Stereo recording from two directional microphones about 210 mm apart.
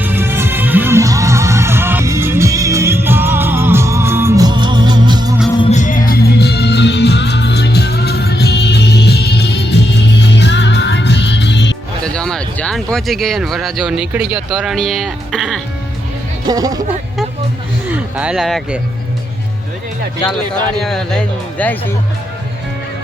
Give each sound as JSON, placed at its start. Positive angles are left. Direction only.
{"t": 0.0, "sound": "music", "side_deg": -10}
{"t": 5.5, "sound": "music", "side_deg": 30}
{"t": 6.1, "sound": "music", "side_deg": 50}
{"t": 12.0, "sound": "speech", "side_deg": 5}
{"t": 16.5, "sound": "speech", "side_deg": -15}
{"t": 17.9, "sound": "speech", "side_deg": -5}
{"t": 20.7, "sound": "speech", "side_deg": 0}